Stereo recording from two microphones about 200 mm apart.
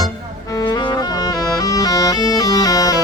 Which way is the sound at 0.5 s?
20° left (ahead or behind).